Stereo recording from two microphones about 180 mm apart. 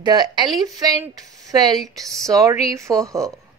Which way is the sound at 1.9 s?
Centre (ahead or behind).